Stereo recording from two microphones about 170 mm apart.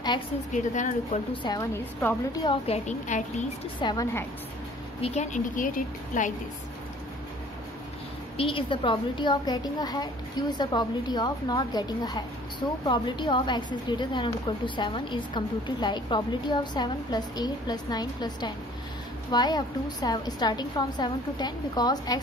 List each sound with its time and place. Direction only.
0.7 s a woman's voice: 45° left (ahead or behind)
1.3 s a woman's voice: 25° left (ahead or behind)
2.4 s a woman's voice: 35° left (ahead or behind)
3.8 s a woman's voice: 20° left (ahead or behind)
5.0 s a woman's voice: 40° left (ahead or behind)
8.4 s a woman's voice: 30° left (ahead or behind)